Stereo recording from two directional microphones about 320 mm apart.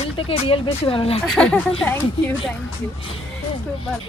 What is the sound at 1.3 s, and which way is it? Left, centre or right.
Speech, centre.